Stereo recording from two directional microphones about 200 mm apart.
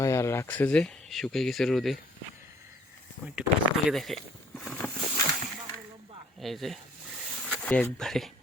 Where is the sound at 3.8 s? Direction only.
Centre (ahead or behind).